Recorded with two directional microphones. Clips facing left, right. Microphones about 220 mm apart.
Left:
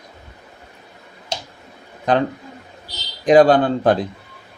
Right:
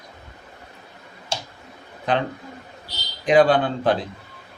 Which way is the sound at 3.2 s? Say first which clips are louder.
Left 4 dB; 40° left (ahead or behind).